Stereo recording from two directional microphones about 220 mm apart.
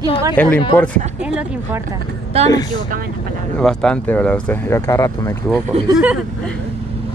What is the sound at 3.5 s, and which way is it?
Speech, 5° left (ahead or behind).